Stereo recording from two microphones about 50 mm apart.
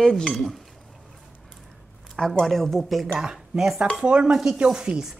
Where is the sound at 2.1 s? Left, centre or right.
Centre.